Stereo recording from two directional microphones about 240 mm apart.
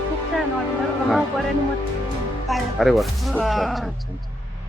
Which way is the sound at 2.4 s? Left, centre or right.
Centre.